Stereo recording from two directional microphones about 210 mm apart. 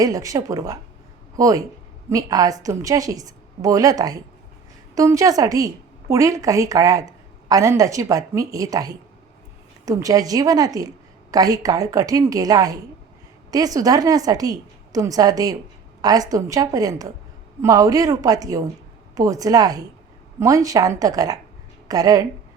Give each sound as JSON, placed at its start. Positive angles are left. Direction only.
{"t": 0.0, "sound": "a woman's voice", "side_deg": -15}